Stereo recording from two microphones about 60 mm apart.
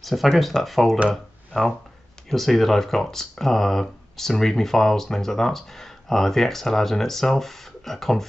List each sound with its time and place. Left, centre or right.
0.0 s speech: centre